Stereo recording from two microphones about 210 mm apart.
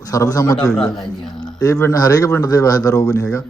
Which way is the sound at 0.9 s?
Centre (ahead or behind).